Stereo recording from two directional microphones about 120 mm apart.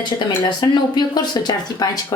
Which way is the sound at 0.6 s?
35° left (ahead or behind).